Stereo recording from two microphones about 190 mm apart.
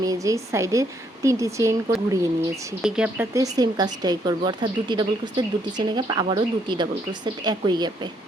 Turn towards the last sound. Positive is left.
turn(degrees=-20)  # may be behind; listen again after turning